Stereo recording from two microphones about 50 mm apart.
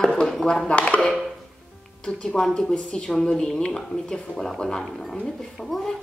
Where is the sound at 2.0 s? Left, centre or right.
Centre.